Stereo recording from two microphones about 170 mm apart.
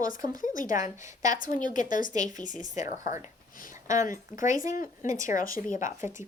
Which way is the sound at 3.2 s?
55° left (ahead or behind).